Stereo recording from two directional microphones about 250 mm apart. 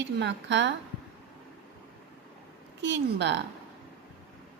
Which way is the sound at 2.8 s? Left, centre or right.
Right.